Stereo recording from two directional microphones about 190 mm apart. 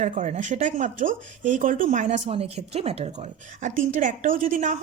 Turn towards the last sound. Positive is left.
turn(degrees=-45)  # may be behind; listen again after turning